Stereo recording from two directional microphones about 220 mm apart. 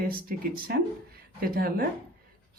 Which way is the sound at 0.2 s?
40° right (ahead or behind).